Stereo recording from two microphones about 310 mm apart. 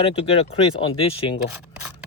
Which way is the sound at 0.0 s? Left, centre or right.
Centre.